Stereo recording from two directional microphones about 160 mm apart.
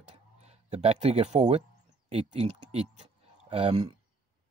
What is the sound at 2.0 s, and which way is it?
Speech, 40° right (ahead or behind).